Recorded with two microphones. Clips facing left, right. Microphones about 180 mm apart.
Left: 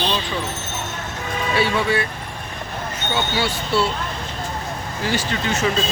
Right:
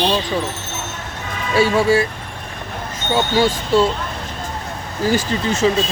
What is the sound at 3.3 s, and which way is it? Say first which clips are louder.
Speech: right 7 dB; 45° right (ahead or behind).